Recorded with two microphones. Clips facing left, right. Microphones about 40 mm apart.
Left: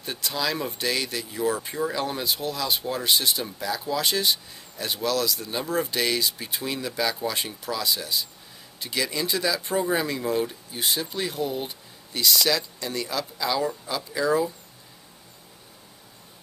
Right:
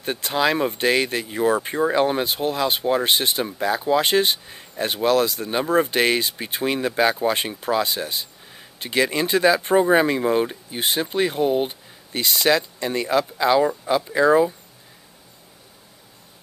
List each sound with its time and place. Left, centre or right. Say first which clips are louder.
0.0 s speech: right 7 dB; right